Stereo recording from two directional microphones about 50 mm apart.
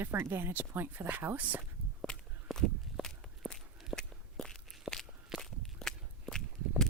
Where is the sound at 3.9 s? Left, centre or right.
Centre.